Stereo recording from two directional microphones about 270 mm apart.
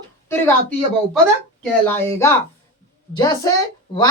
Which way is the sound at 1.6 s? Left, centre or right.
Centre.